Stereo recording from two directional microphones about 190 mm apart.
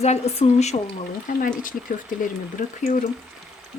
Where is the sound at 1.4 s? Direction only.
45° left (ahead or behind).